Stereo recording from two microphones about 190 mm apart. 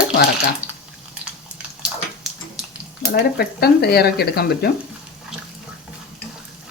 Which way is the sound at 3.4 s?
55° left (ahead or behind).